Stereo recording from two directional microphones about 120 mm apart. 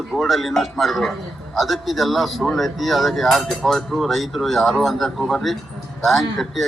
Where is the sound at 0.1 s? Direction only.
Centre (ahead or behind).